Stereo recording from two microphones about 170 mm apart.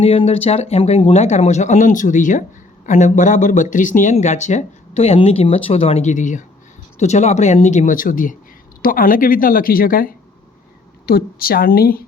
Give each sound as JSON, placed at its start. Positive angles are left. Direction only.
{"t": 0.0, "sound": "speech", "side_deg": 35}